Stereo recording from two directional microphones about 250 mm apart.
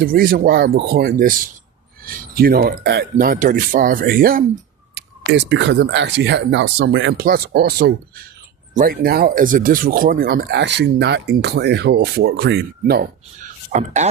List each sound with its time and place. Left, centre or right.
0.0 s speech: right